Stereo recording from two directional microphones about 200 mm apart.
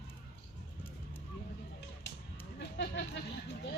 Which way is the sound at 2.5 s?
55° left (ahead or behind).